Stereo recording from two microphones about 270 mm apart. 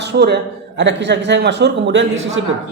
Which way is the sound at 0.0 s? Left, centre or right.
Right.